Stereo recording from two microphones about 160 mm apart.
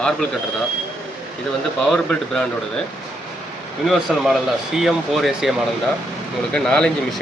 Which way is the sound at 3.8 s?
Centre (ahead or behind).